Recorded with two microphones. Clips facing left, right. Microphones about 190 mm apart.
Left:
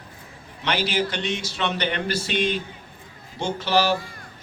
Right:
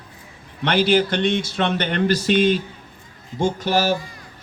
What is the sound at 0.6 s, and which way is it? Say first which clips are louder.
A man's voice: right 7 dB; 55° right (ahead or behind).